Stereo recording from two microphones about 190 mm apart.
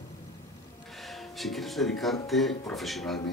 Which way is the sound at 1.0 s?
Centre (ahead or behind).